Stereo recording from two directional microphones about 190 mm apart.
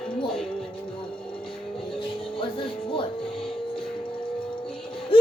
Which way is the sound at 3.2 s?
5° left (ahead or behind).